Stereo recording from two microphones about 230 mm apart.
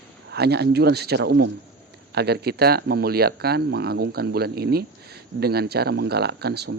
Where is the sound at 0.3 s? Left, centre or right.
Right.